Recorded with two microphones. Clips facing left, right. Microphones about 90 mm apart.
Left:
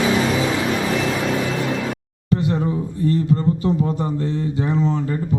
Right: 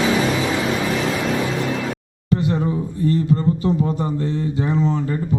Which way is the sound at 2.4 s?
15° right (ahead or behind).